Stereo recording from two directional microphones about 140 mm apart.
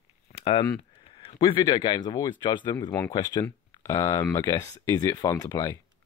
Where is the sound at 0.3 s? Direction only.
40° left (ahead or behind).